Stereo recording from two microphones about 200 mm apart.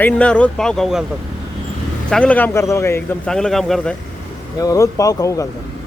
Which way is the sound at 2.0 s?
5° left (ahead or behind).